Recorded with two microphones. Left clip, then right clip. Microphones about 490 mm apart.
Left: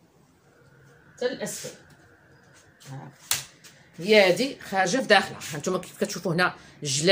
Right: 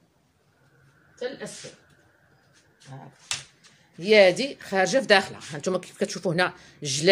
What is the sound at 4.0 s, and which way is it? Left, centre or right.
Speech, right.